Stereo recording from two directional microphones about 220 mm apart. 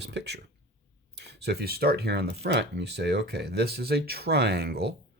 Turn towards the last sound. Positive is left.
turn(degrees=-45)  # may be behind; listen again after turning